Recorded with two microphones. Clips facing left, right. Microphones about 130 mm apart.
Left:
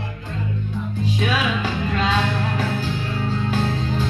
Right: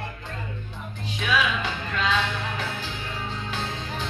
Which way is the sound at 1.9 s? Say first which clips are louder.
Left 3 dB; 40° left (ahead or behind).